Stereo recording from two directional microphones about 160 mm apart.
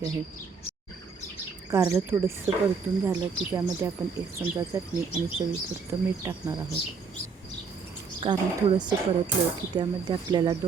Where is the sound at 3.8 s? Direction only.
15° right (ahead or behind).